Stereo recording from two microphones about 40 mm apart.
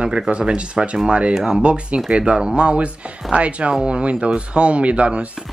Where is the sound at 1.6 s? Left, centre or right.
Right.